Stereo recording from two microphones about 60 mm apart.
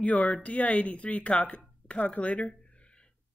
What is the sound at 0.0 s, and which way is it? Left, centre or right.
Speech, left.